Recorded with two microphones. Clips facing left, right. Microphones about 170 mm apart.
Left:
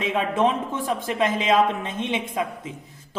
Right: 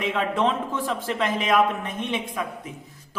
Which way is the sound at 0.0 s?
20° left (ahead or behind).